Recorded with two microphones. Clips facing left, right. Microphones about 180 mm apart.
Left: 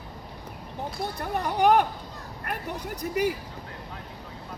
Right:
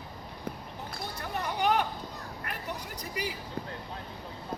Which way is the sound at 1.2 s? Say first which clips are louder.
Left 7 dB; 50° left (ahead or behind).